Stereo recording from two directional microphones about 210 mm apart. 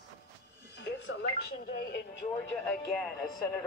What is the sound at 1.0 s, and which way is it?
Speech, 50° left (ahead or behind).